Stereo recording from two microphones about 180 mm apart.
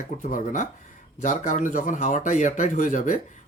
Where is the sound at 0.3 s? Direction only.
45° left (ahead or behind).